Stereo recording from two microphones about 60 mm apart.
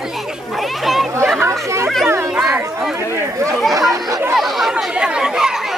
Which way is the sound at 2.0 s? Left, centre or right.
Right.